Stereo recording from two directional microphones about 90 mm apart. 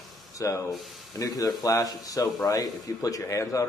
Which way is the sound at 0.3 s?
35° left (ahead or behind).